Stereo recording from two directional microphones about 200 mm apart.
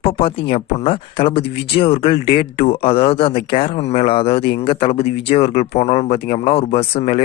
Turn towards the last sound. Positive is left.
turn(degrees=30)  # may be behind; listen again after turning